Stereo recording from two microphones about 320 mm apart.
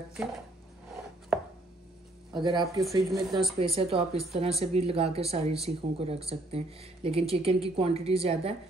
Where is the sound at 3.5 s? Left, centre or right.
Centre.